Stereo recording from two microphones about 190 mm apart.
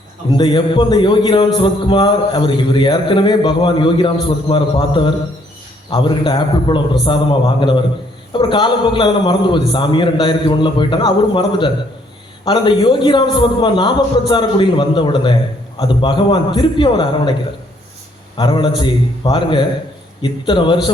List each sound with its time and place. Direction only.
0.3 s speech: 25° left (ahead or behind)
18.3 s speech: 25° left (ahead or behind)